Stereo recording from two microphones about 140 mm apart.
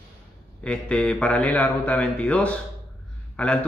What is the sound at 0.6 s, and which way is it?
A man's voice, 5° left (ahead or behind).